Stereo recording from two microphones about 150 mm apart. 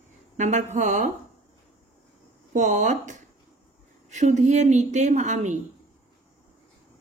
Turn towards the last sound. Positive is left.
turn(degrees=-55)  # may be behind; listen again after turning